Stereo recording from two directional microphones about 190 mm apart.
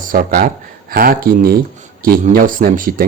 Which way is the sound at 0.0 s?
45° right (ahead or behind).